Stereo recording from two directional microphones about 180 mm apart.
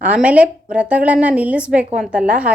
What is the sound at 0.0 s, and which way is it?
A woman's voice, 5° right (ahead or behind).